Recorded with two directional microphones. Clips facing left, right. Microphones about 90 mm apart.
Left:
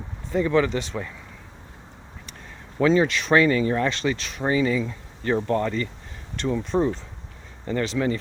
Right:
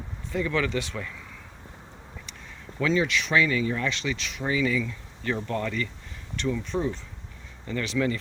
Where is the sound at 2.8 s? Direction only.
40° left (ahead or behind).